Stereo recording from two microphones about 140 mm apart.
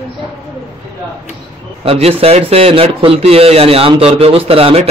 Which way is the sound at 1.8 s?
45° right (ahead or behind).